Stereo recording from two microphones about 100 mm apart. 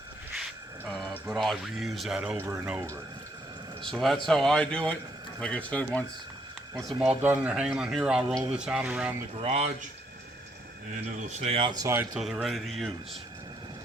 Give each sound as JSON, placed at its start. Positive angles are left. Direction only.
{"t": 0.9, "sound": "a sound", "side_deg": 5}
{"t": 1.3, "sound": "speech", "side_deg": 0}
{"t": 2.4, "sound": "a man's voice", "side_deg": -25}
{"t": 3.8, "sound": "speech", "side_deg": 0}
{"t": 6.7, "sound": "speech", "side_deg": 0}
{"t": 7.2, "sound": "a man's voice", "side_deg": -20}
{"t": 7.5, "sound": "speech", "side_deg": -10}
{"t": 9.4, "sound": "speech", "side_deg": -90}
{"t": 11.3, "sound": "speech", "side_deg": -90}
{"t": 11.6, "sound": "speech", "side_deg": -45}
{"t": 12.1, "sound": "speech", "side_deg": 0}